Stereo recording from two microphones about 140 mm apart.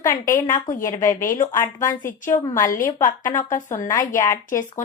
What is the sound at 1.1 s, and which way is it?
Speech, 70° left (ahead or behind).